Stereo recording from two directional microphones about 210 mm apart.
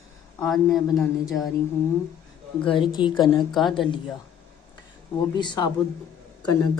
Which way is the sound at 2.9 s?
20° left (ahead or behind).